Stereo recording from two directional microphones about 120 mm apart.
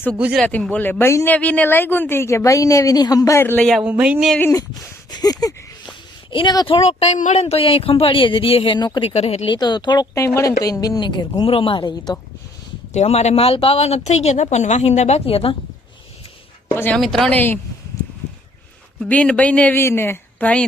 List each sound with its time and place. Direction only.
0.4 s speech: 10° left (ahead or behind)
3.6 s speech: 5° left (ahead or behind)
3.8 s speech: 10° right (ahead or behind)
4.5 s a woman's voice: 30° left (ahead or behind)
6.7 s speech: 55° left (ahead or behind)
9.0 s speech: 60° left (ahead or behind)
9.6 s a woman's voice: 35° left (ahead or behind)
10.2 s a woman's voice: 25° left (ahead or behind)
12.9 s speech: 65° left (ahead or behind)
16.9 s speech: centre (ahead or behind)
17.3 s speech: 15° left (ahead or behind)
19.0 s speech: 10° left (ahead or behind)